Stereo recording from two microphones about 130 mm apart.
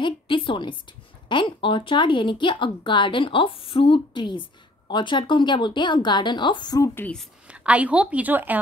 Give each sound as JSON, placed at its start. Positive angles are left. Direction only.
{"t": 0.0, "sound": "speech", "side_deg": 40}
{"t": 7.0, "sound": "a woman's voice", "side_deg": 5}
{"t": 7.4, "sound": "a woman's voice", "side_deg": -10}